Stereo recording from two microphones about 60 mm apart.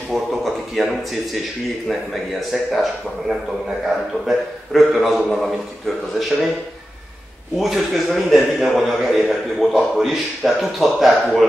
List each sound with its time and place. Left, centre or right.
0.1 s a man's voice: centre
2.5 s a man's voice: centre
7.5 s a man's voice: centre